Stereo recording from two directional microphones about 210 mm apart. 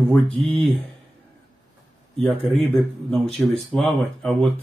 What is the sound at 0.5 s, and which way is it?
Speech, 25° right (ahead or behind).